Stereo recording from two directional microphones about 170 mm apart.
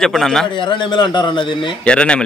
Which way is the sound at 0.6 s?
25° left (ahead or behind).